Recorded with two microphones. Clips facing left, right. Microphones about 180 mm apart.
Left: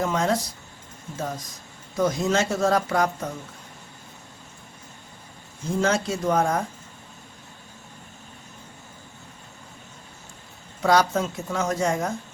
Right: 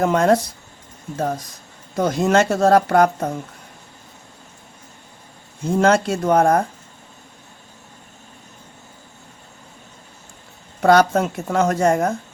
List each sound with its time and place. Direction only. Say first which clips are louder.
0.0 s speech: right 8 dB; 55° right (ahead or behind)
2.0 s speech: right 5 dB; 65° right (ahead or behind)
5.8 s speech: right 6 dB; 65° right (ahead or behind)
10.8 s speech: right 6 dB; 60° right (ahead or behind)